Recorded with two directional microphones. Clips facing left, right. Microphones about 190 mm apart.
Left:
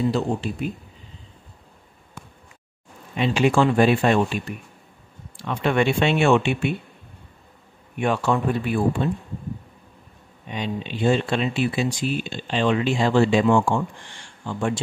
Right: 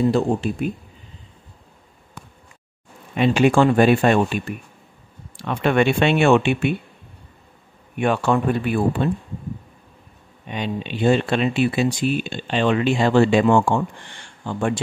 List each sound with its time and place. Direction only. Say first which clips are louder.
0.1 s speech: right 4 dB; 50° right (ahead or behind)
3.2 s speech: right 3 dB; 55° right (ahead or behind)
5.4 s speech: right 3 dB; 60° right (ahead or behind)
8.0 s speech: right 2 dB; 60° right (ahead or behind)
10.5 s speech: right 2 dB; 60° right (ahead or behind)